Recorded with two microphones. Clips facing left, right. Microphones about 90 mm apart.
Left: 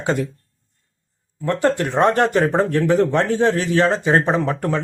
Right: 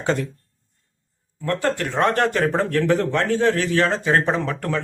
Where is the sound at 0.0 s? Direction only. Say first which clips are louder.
Left 1 dB; 15° left (ahead or behind).